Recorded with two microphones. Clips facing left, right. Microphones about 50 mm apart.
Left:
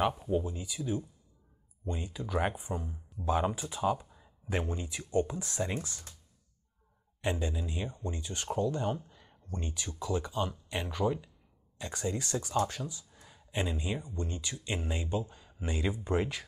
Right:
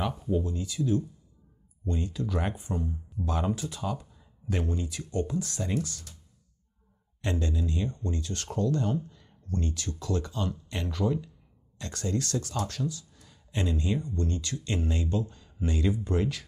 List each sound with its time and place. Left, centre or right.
0.2 s speech: centre
7.2 s speech: centre